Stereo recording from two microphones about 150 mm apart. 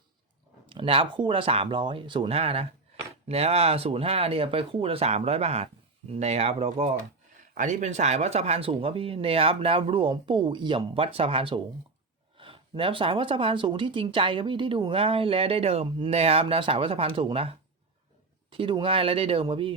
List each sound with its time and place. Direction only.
0.7 s speech: 35° right (ahead or behind)
7.5 s speech: 55° right (ahead or behind); by 19.7 s 35° right (ahead or behind)